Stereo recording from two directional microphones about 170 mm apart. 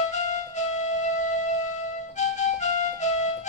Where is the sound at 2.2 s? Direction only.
45° left (ahead or behind).